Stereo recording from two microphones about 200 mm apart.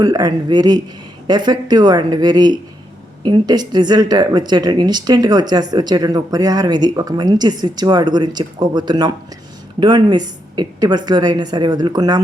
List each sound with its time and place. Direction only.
0.0 s speech: 20° right (ahead or behind)